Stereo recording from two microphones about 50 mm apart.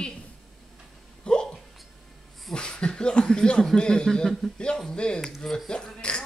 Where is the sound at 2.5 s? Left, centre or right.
Centre.